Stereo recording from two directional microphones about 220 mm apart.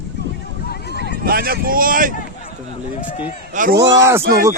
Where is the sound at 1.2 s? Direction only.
45° right (ahead or behind).